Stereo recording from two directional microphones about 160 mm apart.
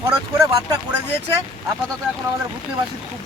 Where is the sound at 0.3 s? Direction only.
25° right (ahead or behind).